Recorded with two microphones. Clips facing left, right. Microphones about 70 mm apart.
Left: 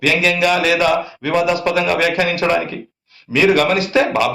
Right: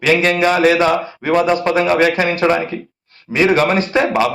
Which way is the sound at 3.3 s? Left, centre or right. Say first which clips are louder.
Even; right.